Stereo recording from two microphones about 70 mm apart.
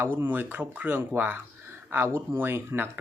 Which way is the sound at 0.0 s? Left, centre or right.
Right.